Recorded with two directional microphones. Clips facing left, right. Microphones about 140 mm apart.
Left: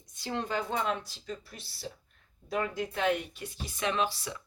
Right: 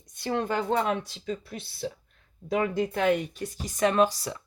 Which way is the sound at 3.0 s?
45° right (ahead or behind).